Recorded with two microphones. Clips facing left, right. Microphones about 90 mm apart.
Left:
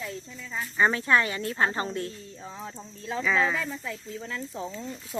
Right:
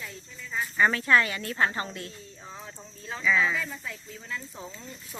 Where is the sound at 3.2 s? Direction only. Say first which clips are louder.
Even; 40° left (ahead or behind).